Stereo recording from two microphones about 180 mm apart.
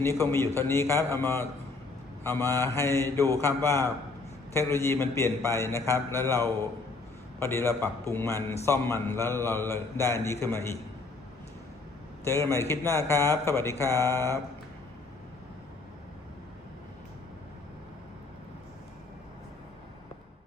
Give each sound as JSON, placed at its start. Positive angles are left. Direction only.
{"t": 0.0, "sound": "a man's voice", "side_deg": 15}
{"t": 12.2, "sound": "a man's voice", "side_deg": 15}